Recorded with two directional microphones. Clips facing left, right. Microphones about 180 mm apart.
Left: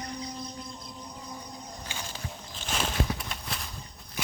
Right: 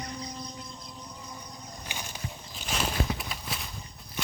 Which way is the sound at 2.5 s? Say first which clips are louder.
Even; 5° right (ahead or behind).